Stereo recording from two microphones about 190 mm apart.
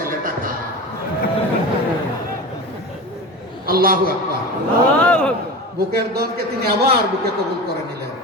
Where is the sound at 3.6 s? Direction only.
50° right (ahead or behind).